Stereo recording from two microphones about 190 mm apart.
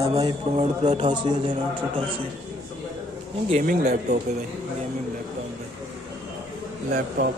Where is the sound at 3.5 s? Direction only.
40° right (ahead or behind).